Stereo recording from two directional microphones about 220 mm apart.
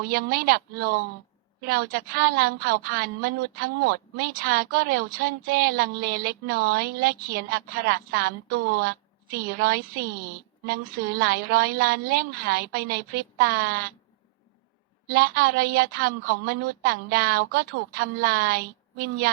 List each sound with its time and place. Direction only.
0.0 s a woman's voice: 40° right (ahead or behind)
15.1 s speech: 40° right (ahead or behind)